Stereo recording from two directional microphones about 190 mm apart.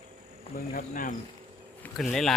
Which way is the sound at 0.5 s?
50° left (ahead or behind).